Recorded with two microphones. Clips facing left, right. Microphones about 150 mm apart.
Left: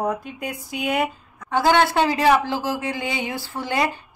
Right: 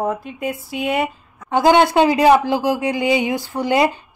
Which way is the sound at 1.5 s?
20° right (ahead or behind).